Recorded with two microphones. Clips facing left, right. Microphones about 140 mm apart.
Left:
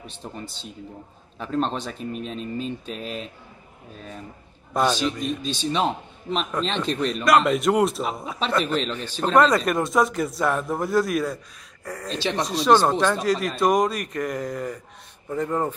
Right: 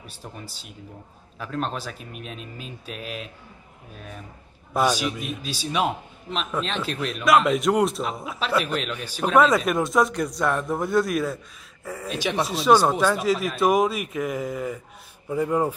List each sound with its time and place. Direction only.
0.0 s a man's voice: 10° right (ahead or behind)
4.7 s a man's voice: 10° right (ahead or behind)